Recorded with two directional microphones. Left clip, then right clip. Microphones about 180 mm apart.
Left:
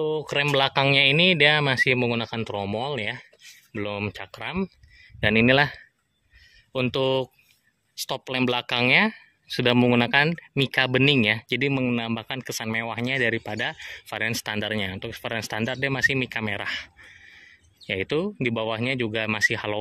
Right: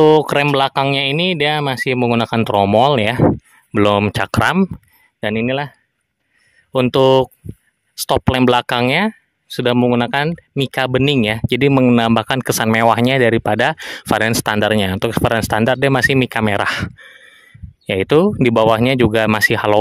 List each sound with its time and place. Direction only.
0.0 s speech: 55° right (ahead or behind)
0.4 s speech: 30° right (ahead or behind); by 4.6 s 50° right (ahead or behind)
5.2 s speech: 20° right (ahead or behind)
6.7 s speech: 50° right (ahead or behind)